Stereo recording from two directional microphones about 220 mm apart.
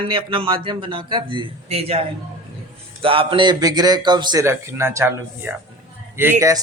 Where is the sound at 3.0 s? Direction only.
25° right (ahead or behind).